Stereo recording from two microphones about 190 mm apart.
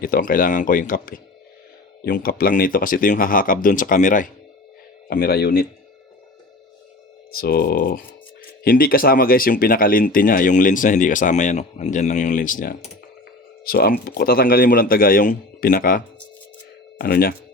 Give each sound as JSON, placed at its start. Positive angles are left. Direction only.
{"t": 0.0, "sound": "speech", "side_deg": 50}
{"t": 7.3, "sound": "speech", "side_deg": 50}